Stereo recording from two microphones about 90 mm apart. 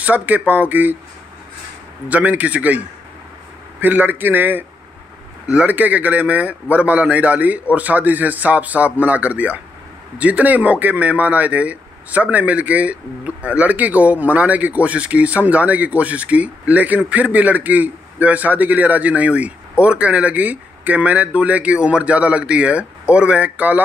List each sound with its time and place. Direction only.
0.0 s speech: 15° right (ahead or behind)
2.0 s speech: 15° right (ahead or behind)
3.8 s speech: 20° right (ahead or behind)